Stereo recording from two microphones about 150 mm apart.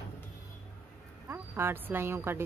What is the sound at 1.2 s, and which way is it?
Speech, 15° right (ahead or behind).